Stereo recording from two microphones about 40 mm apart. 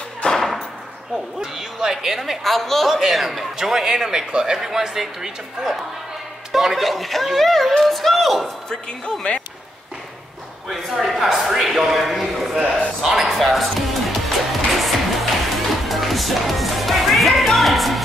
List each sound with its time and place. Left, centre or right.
0.3 s a sound: centre
1.1 s speech: centre
2.4 s a woman's voice: centre
9.3 s speech: left
11.0 s a woman's voice: centre
11.6 s a sound: centre
13.0 s music: centre